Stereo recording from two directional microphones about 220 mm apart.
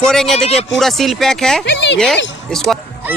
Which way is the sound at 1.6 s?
55° left (ahead or behind).